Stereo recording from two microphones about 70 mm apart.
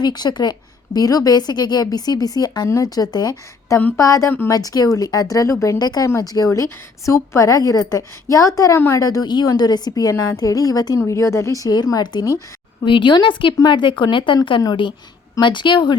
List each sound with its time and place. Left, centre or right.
0.0 s speech: left
0.9 s a woman's voice: left
2.6 s a woman's voice: left
3.9 s a woman's voice: left
4.4 s a woman's voice: left
5.8 s a woman's voice: left
9.2 s a woman's voice: left
11.0 s a woman's voice: left
11.9 s speech: left
12.8 s a woman's voice: left
14.3 s a woman's voice: left
15.5 s a woman's voice: left